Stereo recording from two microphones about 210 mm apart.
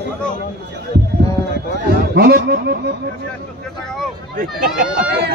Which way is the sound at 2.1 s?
50° right (ahead or behind).